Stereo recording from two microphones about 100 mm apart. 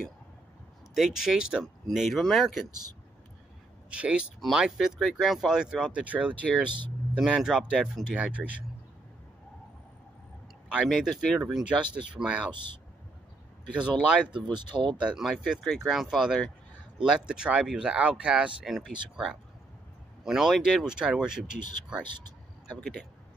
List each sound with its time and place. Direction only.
0.9 s speech: 5° right (ahead or behind)
2.7 s speech: 40° right (ahead or behind)
3.9 s speech: 10° right (ahead or behind)
7.2 s speech: 5° right (ahead or behind)
10.9 s speech: centre (ahead or behind)
14.3 s speech: 50° right (ahead or behind)
15.0 s speech: 10° right (ahead or behind)
20.2 s speech: centre (ahead or behind)